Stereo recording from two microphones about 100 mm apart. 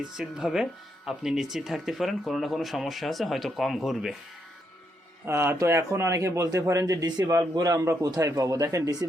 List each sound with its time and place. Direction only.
0.0 s speech: 5° right (ahead or behind)
5.2 s a man's voice: 25° right (ahead or behind)